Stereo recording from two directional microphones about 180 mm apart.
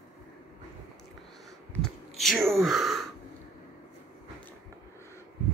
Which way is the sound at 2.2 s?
Centre (ahead or behind).